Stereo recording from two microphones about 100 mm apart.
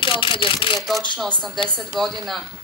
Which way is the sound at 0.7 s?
Centre (ahead or behind).